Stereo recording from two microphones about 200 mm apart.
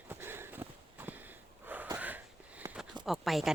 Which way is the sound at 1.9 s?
10° right (ahead or behind).